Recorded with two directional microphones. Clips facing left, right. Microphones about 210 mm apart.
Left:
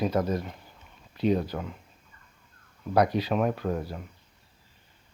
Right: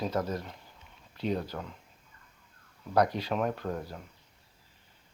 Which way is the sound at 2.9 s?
10° left (ahead or behind).